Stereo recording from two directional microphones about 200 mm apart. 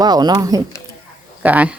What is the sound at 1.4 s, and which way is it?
Speech, 10° right (ahead or behind).